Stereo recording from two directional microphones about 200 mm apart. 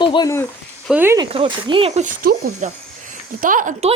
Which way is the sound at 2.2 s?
50° right (ahead or behind).